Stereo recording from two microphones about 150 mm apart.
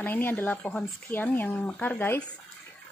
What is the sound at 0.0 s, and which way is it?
Speech, 15° left (ahead or behind).